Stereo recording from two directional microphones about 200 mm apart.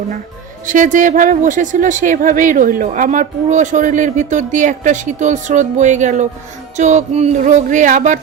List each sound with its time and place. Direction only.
0.7 s speech: 40° right (ahead or behind)